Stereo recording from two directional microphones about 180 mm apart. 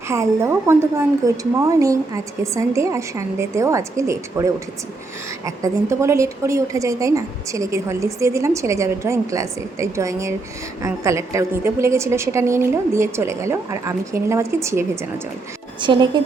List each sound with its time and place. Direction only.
0.1 s a woman's voice: 15° right (ahead or behind)